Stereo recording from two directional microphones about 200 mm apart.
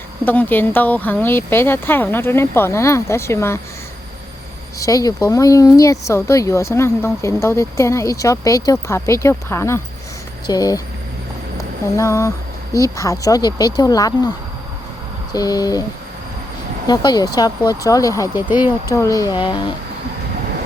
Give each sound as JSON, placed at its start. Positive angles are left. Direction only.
{"t": 0.3, "sound": "speech", "side_deg": 10}
{"t": 4.8, "sound": "speech", "side_deg": 15}
{"t": 11.9, "sound": "speech", "side_deg": 15}
{"t": 16.8, "sound": "speech", "side_deg": 20}